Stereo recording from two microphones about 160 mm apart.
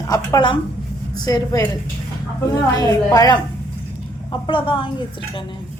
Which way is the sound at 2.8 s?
25° left (ahead or behind).